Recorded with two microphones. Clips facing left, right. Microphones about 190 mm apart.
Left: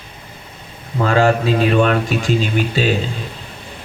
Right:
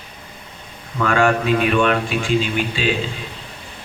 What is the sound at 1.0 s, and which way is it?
Speech, 35° left (ahead or behind).